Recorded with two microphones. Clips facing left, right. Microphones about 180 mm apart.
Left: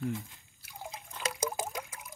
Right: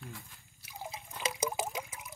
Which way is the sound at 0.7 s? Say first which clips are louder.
Right 1 dB; 5° right (ahead or behind).